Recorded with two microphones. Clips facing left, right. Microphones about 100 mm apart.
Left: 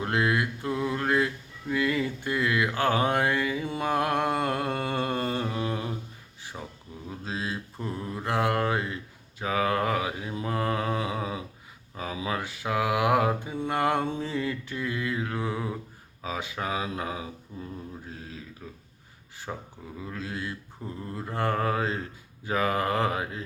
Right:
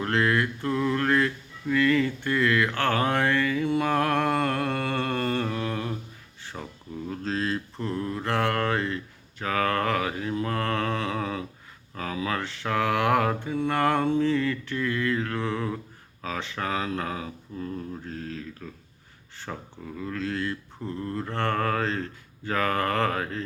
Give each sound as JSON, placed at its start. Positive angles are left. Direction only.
{"t": 0.0, "sound": "mantra", "side_deg": 15}
{"t": 6.4, "sound": "a sound", "side_deg": 15}
{"t": 7.1, "sound": "mantra", "side_deg": 10}
{"t": 16.2, "sound": "a sound", "side_deg": 15}
{"t": 19.5, "sound": "speech", "side_deg": 10}
{"t": 20.0, "sound": "mantra", "side_deg": 15}